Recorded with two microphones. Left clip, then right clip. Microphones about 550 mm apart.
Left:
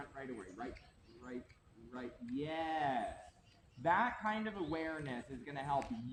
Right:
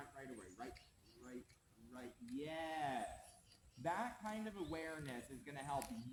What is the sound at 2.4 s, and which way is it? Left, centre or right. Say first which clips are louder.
A man's voice: left 7 dB; right.